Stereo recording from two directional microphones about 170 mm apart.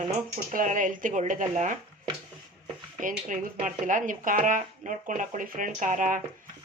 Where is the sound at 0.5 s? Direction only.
50° right (ahead or behind).